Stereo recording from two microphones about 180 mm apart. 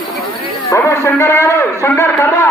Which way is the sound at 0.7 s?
15° left (ahead or behind).